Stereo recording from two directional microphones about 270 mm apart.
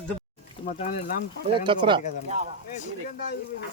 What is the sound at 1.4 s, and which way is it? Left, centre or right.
Speech, centre.